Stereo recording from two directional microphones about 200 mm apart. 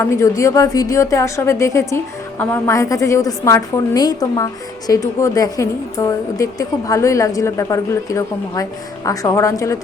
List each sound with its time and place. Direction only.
0.0 s a woman's voice: 15° left (ahead or behind)